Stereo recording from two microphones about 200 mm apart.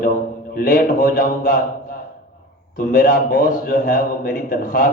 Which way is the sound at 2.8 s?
45° left (ahead or behind).